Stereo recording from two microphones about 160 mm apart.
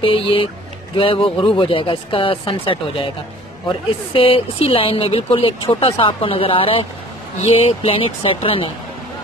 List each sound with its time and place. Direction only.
0.0 s speech: 35° left (ahead or behind)
4.1 s speech: 35° left (ahead or behind)